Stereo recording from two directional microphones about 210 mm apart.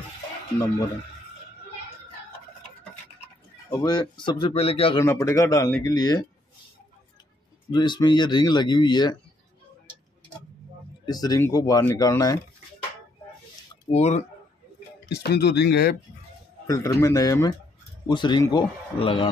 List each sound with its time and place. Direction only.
3.7 s speech: 20° left (ahead or behind)
4.9 s speech: 15° left (ahead or behind)
7.7 s speech: 20° left (ahead or behind)
11.1 s speech: 20° left (ahead or behind)
13.8 s speech: 30° left (ahead or behind)
15.0 s speech: 50° left (ahead or behind)
16.6 s speech: 15° left (ahead or behind)